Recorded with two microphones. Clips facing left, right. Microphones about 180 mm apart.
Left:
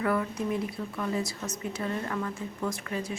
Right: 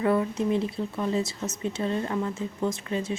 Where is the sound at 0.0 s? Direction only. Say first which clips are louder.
Right 4 dB; 25° right (ahead or behind).